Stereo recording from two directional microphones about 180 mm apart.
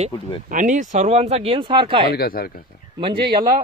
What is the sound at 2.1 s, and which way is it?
Speech, 55° left (ahead or behind).